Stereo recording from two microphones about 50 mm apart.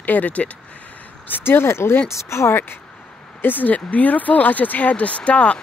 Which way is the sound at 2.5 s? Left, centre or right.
Left.